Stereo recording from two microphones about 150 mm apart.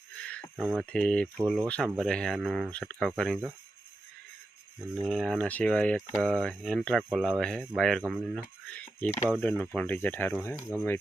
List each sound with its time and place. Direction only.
0.2 s a sound: 10° left (ahead or behind)
0.5 s speech: 5° right (ahead or behind)
0.9 s speech: 5° left (ahead or behind)
4.8 s speech: centre (ahead or behind); by 10.7 s 15° left (ahead or behind)